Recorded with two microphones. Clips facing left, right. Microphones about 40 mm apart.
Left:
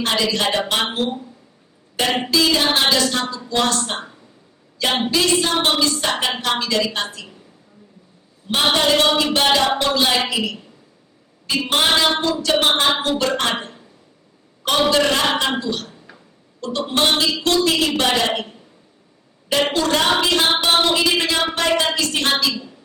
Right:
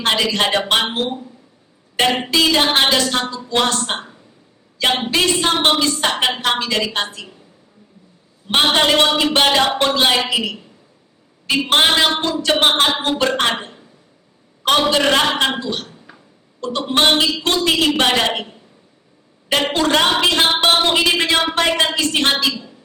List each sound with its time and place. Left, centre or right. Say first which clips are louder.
0.0 s a woman's voice: right 2 dB; right
2.0 s a woman's voice: right 2 dB; right
5.1 s a woman's voice: right 1 dB; right
8.4 s a woman's voice: right 2 dB; right
14.8 s a woman's voice: right 2 dB; right
19.5 s a woman's voice: right 1 dB; right